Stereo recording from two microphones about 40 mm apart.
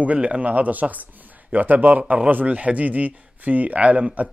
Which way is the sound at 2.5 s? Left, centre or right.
Right.